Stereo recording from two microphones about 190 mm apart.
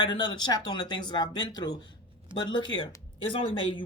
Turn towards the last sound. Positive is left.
turn(degrees=25)  # may be behind; listen again after turning